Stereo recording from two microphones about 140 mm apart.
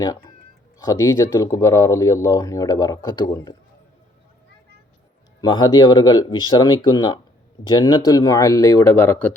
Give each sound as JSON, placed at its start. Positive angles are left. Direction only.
{"t": 0.9, "sound": "speech", "side_deg": 20}
{"t": 5.4, "sound": "speech", "side_deg": 30}